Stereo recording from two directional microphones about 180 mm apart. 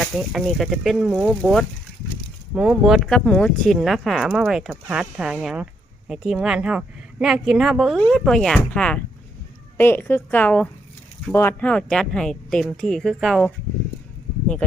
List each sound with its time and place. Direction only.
0.0 s a woman's voice: centre (ahead or behind)